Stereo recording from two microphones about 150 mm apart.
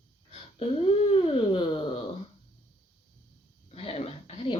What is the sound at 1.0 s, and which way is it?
Speech, 35° left (ahead or behind).